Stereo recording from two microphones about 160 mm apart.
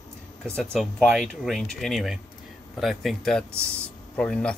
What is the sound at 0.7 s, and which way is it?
Speech, centre (ahead or behind).